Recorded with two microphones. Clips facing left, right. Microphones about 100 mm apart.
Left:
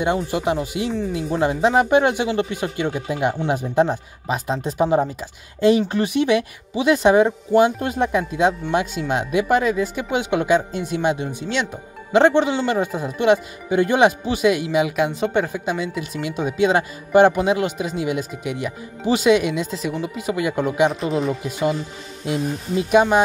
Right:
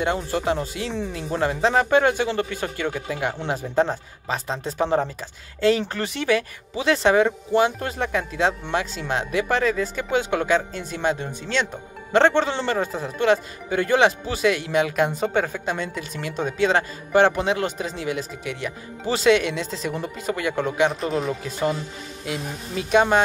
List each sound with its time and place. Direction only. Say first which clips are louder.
0.0 s a woman's voice: left 3 dB; 15° left (ahead or behind)
20.9 s a woman's voice: left 3 dB; centre (ahead or behind)
21.3 s speech: left 3 dB; 15° left (ahead or behind)
22.2 s speech: left 7 dB; 25° left (ahead or behind)
22.8 s speech: left 2 dB; 10° left (ahead or behind)